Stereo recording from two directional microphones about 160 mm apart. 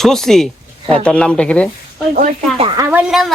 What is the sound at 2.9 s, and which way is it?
Speech, 5° right (ahead or behind).